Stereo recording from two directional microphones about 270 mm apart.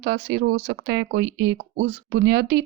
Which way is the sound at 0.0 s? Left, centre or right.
Right.